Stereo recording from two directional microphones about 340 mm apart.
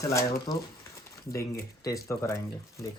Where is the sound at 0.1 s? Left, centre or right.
Centre.